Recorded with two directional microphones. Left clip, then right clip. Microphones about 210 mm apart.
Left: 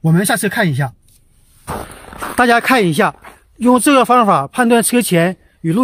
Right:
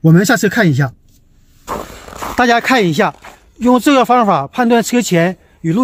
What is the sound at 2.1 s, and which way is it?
Speech, 10° left (ahead or behind).